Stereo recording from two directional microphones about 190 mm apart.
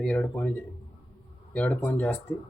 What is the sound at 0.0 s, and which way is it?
Speech, 5° left (ahead or behind).